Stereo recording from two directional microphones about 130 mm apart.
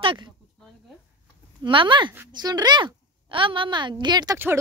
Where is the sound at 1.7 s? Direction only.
40° right (ahead or behind).